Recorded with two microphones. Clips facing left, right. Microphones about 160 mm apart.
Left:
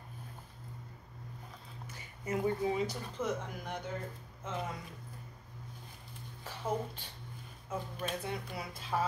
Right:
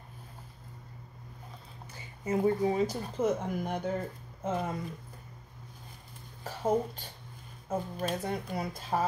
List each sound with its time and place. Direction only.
2.2 s speech: 30° right (ahead or behind)
3.2 s speech: 45° right (ahead or behind)
6.4 s speech: 45° right (ahead or behind)